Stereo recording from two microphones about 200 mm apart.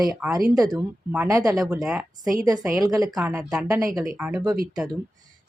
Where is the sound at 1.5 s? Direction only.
Centre (ahead or behind).